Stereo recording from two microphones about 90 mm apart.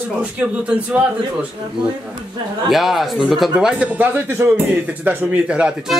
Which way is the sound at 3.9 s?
20° right (ahead or behind).